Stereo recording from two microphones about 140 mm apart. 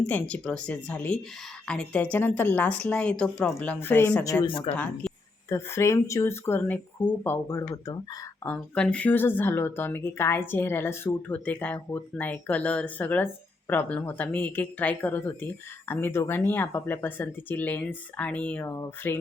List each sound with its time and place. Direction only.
0.0 s speech: 10° left (ahead or behind); by 4.4 s 25° left (ahead or behind)
4.4 s speech: 40° left (ahead or behind)
4.7 s speech: 10° left (ahead or behind)
8.4 s speech: 10° left (ahead or behind)